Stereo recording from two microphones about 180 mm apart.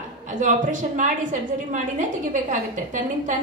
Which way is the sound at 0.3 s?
45° right (ahead or behind).